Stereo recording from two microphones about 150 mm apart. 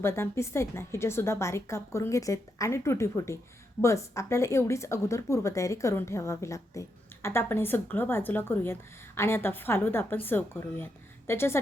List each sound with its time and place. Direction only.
0.0 s a woman's voice: 15° left (ahead or behind)